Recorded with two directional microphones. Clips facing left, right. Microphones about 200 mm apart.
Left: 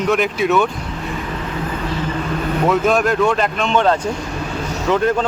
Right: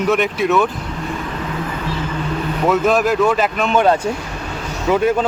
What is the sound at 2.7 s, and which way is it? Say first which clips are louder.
Speech: right 2 dB; centre (ahead or behind).